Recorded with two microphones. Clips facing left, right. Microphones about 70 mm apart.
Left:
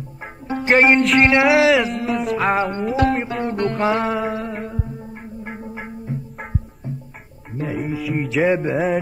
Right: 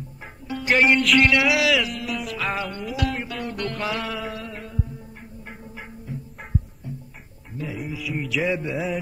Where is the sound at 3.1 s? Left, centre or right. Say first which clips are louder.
Left 8 dB; left.